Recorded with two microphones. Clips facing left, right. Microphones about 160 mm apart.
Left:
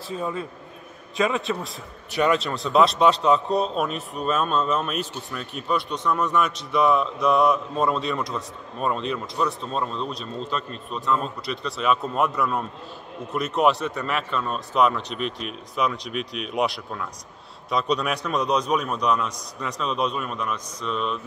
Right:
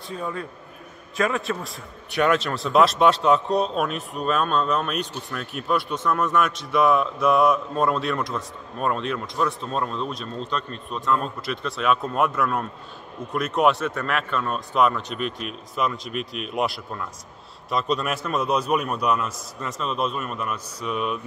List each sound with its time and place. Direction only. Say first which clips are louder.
0.2 s a man's voice: left 1 dB; 15° left (ahead or behind)
1.3 s speech: left 1 dB; centre (ahead or behind)